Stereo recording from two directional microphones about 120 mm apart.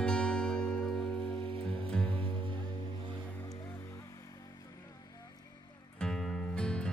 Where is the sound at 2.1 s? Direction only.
45° right (ahead or behind).